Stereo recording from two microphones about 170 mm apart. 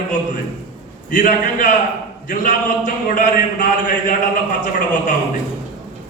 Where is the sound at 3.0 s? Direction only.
50° left (ahead or behind).